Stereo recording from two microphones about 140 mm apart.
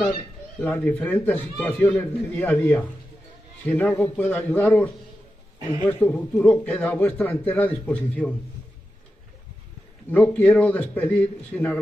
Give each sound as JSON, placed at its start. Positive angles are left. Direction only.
{"t": 0.6, "sound": "a man's voice", "side_deg": 10}
{"t": 10.1, "sound": "a man's voice", "side_deg": 10}